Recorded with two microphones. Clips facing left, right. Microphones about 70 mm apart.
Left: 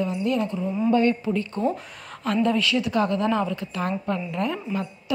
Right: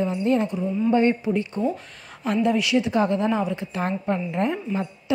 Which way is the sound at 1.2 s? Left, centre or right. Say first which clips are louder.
Right 1 dB; centre.